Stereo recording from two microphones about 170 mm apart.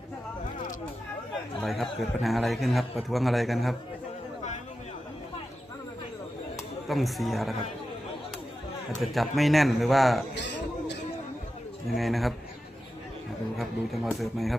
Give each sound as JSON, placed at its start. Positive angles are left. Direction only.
{"t": 1.6, "sound": "a man's voice", "side_deg": 0}
{"t": 6.8, "sound": "a man's voice", "side_deg": 0}
{"t": 9.0, "sound": "a man's voice", "side_deg": 0}
{"t": 10.3, "sound": "a sound", "side_deg": 90}
{"t": 11.9, "sound": "a man's voice", "side_deg": 0}
{"t": 13.6, "sound": "a man's voice", "side_deg": 0}